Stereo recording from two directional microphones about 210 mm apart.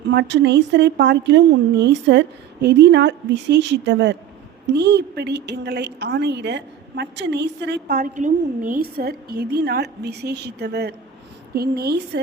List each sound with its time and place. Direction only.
0.1 s a woman's voice: 55° right (ahead or behind)